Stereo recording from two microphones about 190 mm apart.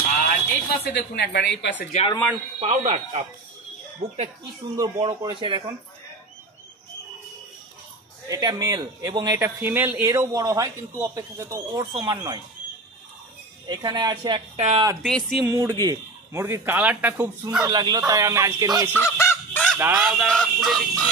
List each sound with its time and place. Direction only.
0.8 s speech: 60° left (ahead or behind)
1.9 s speech: 35° left (ahead or behind)
2.6 s speech: 35° right (ahead or behind)
4.7 s speech: 20° right (ahead or behind)
8.3 s speech: 20° right (ahead or behind)
9.6 s a man's voice: 10° right (ahead or behind)
13.7 s speech: 20° right (ahead or behind)
15.0 s chicken: centre (ahead or behind)
15.4 s a man's voice: 20° right (ahead or behind)
17.6 s speech: 20° right (ahead or behind)
18.9 s honk: 15° left (ahead or behind)
19.8 s a man's voice: 10° right (ahead or behind)
20.1 s chicken: centre (ahead or behind)